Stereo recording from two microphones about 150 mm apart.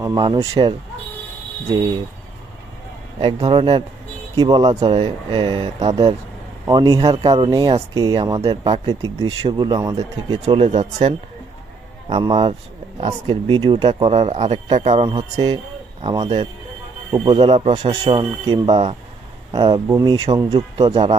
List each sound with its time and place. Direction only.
0.0 s speech: 25° right (ahead or behind)
3.2 s speech: 35° right (ahead or behind)
6.7 s speech: 25° right (ahead or behind); by 10.8 s 40° right (ahead or behind)
10.8 s speech: 50° right (ahead or behind)
12.0 s speech: 35° right (ahead or behind)
14.8 s speech: 45° right (ahead or behind)
16.2 s speech: 45° right (ahead or behind)
17.7 s speech: 45° right (ahead or behind)
18.1 s speech: 30° right (ahead or behind)
20.7 s speech: 40° right (ahead or behind)